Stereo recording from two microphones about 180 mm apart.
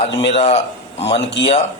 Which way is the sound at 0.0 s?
35° left (ahead or behind).